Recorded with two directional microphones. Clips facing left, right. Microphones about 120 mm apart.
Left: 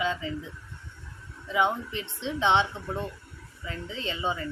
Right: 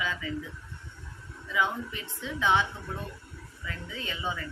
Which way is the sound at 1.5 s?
25° left (ahead or behind).